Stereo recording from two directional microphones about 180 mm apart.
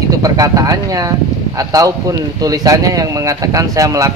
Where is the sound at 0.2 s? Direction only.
20° right (ahead or behind).